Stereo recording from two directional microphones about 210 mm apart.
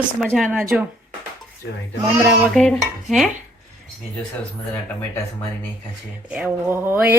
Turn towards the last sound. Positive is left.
turn(degrees=-10)  # may be behind; listen again after turning